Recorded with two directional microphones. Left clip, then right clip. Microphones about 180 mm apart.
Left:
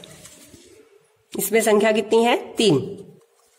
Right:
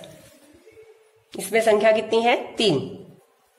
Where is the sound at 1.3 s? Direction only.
35° left (ahead or behind).